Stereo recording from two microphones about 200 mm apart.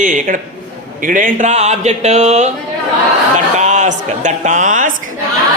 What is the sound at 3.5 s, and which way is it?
Speech, 35° right (ahead or behind).